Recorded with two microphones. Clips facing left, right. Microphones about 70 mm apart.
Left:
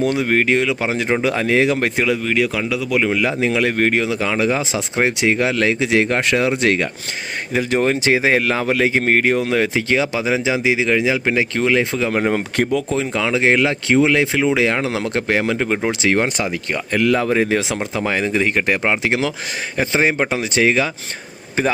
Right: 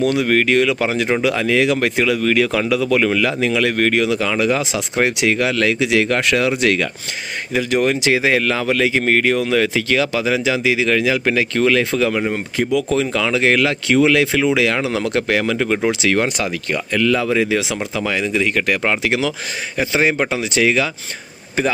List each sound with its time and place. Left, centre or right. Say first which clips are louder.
0.0 s speech: right 1 dB; left
1.2 s speech: left 1 dB; left
2.2 s speech: right 3 dB; centre
3.4 s speech: left 1 dB; left
12.3 s speech: left 2 dB; left
12.9 s speech: right 1 dB; centre